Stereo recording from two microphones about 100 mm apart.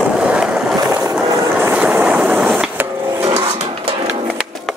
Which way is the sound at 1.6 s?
15° right (ahead or behind).